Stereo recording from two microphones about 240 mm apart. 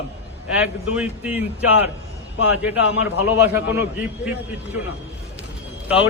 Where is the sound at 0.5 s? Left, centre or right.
Centre.